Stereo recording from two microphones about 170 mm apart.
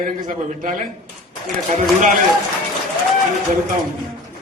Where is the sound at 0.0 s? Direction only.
50° right (ahead or behind).